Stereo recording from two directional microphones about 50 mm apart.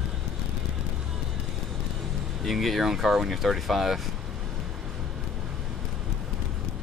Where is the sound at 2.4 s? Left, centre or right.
Centre.